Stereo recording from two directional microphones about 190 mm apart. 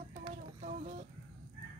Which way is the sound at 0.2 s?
40° right (ahead or behind).